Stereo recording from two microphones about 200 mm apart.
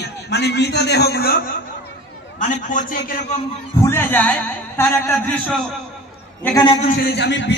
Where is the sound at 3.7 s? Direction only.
10° left (ahead or behind).